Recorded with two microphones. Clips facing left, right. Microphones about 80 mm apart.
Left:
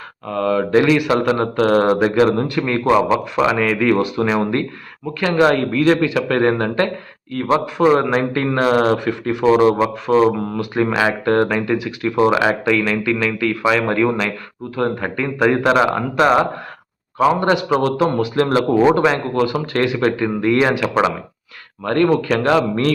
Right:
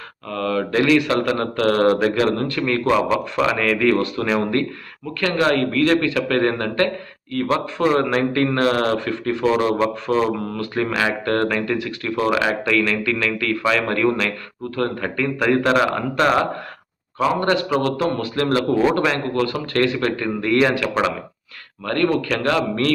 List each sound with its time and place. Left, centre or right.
0.3 s speech: centre